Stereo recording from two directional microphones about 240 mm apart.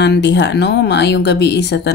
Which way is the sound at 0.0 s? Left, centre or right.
Left.